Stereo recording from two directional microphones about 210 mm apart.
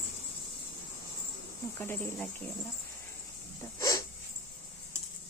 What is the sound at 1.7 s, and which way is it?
Speech, 10° left (ahead or behind).